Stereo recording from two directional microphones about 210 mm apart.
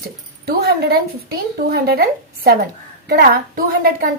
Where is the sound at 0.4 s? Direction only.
50° right (ahead or behind).